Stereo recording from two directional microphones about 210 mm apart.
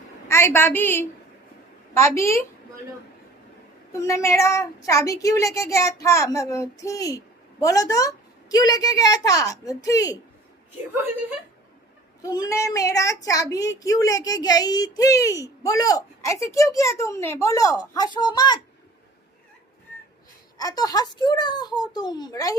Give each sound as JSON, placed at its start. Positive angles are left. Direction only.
{"t": 0.3, "sound": "a woman's voice", "side_deg": 10}
{"t": 3.9, "sound": "a child's voice", "side_deg": 15}
{"t": 11.0, "sound": "a woman's voice", "side_deg": -10}
{"t": 12.2, "sound": "a child's voice", "side_deg": 15}
{"t": 20.6, "sound": "a child's voice", "side_deg": 20}